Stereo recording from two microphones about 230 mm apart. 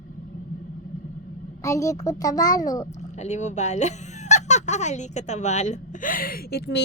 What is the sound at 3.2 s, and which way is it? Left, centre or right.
Speech, left.